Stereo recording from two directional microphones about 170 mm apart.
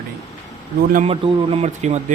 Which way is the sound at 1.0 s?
35° right (ahead or behind).